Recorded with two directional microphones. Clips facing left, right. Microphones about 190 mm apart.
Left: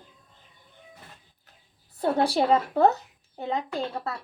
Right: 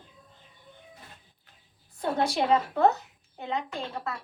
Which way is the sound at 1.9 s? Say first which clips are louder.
Left 4 dB; 35° left (ahead or behind).